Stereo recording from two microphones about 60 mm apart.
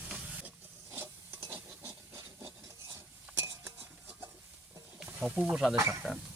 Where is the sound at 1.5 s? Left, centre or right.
Right.